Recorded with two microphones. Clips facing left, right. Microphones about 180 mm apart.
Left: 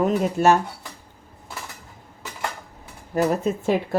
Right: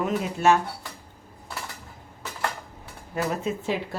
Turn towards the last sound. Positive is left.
turn(degrees=45)  # may be behind; listen again after turning